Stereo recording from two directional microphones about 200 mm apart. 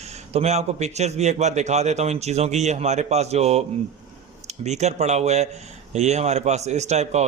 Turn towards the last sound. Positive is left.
turn(degrees=-35)  # may be behind; listen again after turning